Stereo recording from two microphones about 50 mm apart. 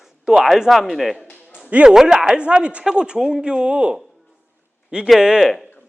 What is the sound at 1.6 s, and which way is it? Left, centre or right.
Speech, right.